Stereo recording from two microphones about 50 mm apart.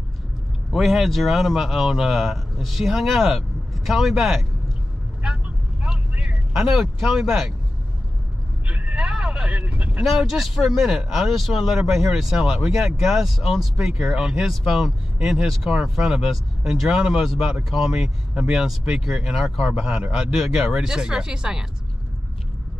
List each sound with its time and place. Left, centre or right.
0.7 s speech: centre
5.2 s vehicle: centre
8.6 s vehicle: right
10.3 s speech: centre
19.7 s speech: centre